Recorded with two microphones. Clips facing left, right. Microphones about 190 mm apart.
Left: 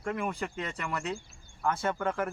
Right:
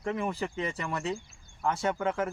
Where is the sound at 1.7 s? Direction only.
Centre (ahead or behind).